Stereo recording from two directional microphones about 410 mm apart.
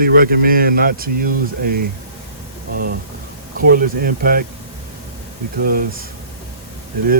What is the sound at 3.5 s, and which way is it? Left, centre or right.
Speech, right.